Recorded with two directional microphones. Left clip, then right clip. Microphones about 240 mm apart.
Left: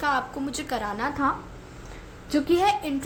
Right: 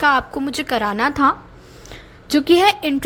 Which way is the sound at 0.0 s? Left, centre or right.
Right.